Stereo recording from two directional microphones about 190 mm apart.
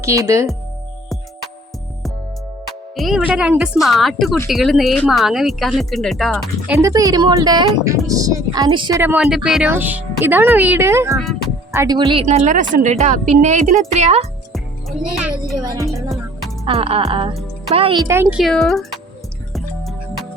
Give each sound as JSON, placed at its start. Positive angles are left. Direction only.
{"t": 0.0, "sound": "speech", "side_deg": -15}
{"t": 2.9, "sound": "speech", "side_deg": 0}
{"t": 6.7, "sound": "speech", "side_deg": -15}
{"t": 9.0, "sound": "speech", "side_deg": -10}
{"t": 12.2, "sound": "speech", "side_deg": -40}
{"t": 14.5, "sound": "music", "side_deg": 0}
{"t": 15.5, "sound": "speech", "side_deg": -20}
{"t": 16.0, "sound": "music", "side_deg": 0}
{"t": 16.6, "sound": "speech", "side_deg": -30}
{"t": 18.1, "sound": "speech", "side_deg": -10}
{"t": 19.5, "sound": "music", "side_deg": 0}